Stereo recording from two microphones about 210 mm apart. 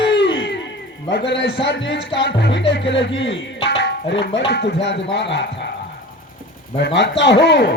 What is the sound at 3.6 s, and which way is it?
Music, 60° left (ahead or behind).